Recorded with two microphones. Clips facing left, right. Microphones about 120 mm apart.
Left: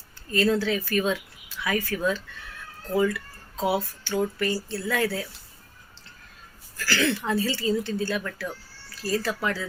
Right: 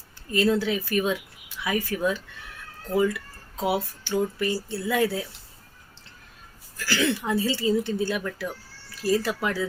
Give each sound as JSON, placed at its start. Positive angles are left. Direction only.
{"t": 0.3, "sound": "speech", "side_deg": -20}
{"t": 6.7, "sound": "speech", "side_deg": -15}